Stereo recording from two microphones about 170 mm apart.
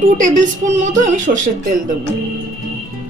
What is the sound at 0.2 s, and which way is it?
Speech, 50° right (ahead or behind).